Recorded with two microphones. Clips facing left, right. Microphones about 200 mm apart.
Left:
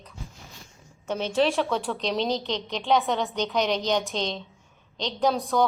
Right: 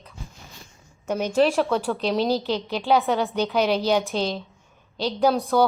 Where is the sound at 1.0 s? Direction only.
10° right (ahead or behind).